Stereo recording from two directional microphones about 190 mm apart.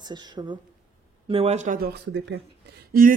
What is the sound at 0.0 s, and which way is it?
A woman's voice, 25° right (ahead or behind).